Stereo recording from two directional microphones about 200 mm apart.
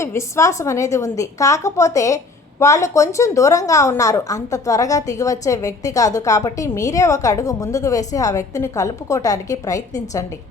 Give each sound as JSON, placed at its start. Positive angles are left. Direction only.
{"t": 0.0, "sound": "a woman's voice", "side_deg": 15}